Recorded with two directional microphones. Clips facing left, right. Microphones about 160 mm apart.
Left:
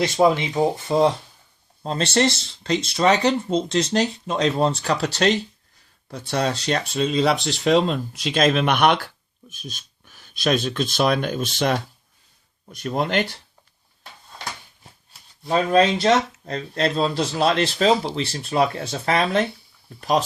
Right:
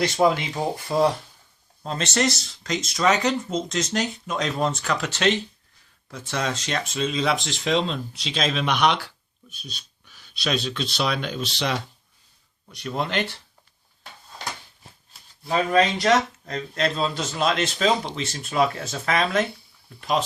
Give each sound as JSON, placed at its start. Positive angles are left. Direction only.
{"t": 0.0, "sound": "speech", "side_deg": 20}
{"t": 1.8, "sound": "speech", "side_deg": 35}
{"t": 15.4, "sound": "speech", "side_deg": 25}